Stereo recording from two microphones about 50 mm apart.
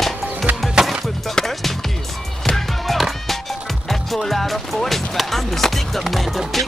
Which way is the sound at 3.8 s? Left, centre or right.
Centre.